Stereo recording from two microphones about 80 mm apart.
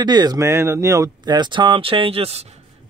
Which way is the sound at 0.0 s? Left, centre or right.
Right.